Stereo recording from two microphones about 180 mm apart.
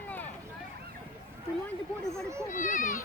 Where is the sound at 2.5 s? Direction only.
45° left (ahead or behind).